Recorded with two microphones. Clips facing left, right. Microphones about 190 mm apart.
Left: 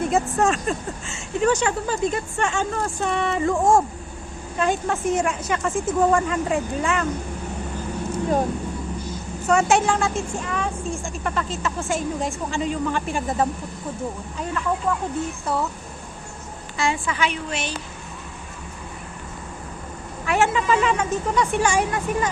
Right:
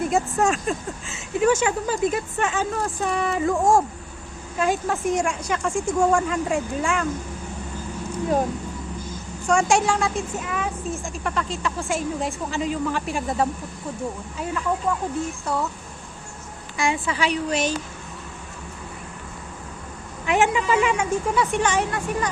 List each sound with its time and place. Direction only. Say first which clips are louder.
0.3 s a woman's voice: left 1 dB; centre (ahead or behind)
9.5 s a woman's voice: left 1 dB; 5° left (ahead or behind)
16.7 s a woman's voice: even; 15° right (ahead or behind)
17.1 s a woman's voice: right 2 dB; 35° right (ahead or behind)
20.2 s a woman's voice: even; 15° right (ahead or behind)
21.5 s speech: left 1 dB; 10° left (ahead or behind)